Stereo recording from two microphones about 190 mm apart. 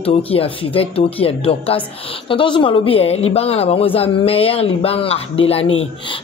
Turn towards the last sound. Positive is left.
turn(degrees=30)  # may be behind; listen again after turning